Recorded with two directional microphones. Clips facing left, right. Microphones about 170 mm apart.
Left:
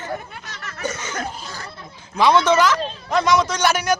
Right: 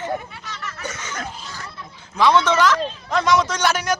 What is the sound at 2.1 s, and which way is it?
A man's voice, 15° left (ahead or behind).